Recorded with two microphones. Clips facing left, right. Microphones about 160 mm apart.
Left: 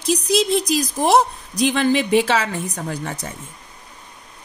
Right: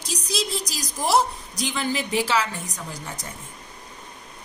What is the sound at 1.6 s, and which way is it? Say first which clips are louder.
A woman's voice: left 9 dB; 75° left (ahead or behind).